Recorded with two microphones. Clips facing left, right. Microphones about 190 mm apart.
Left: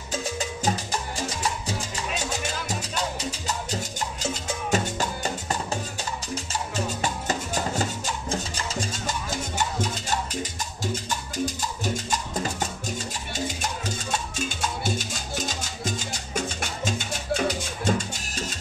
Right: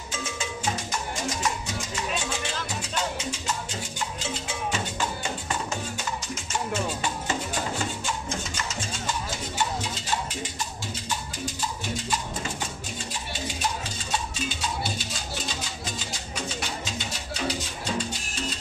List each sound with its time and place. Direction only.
0.1 s cowbell: 35° left (ahead or behind)
1.4 s music: 35° left (ahead or behind)
7.0 s music: 40° left (ahead or behind)
11.8 s music: 40° left (ahead or behind)